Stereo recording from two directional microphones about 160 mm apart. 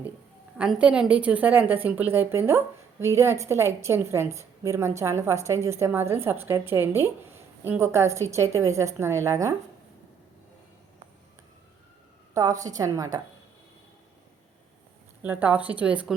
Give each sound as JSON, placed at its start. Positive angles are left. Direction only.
{"t": 0.5, "sound": "a woman's voice", "side_deg": -5}
{"t": 12.3, "sound": "a woman's voice", "side_deg": -25}
{"t": 15.2, "sound": "a woman's voice", "side_deg": -10}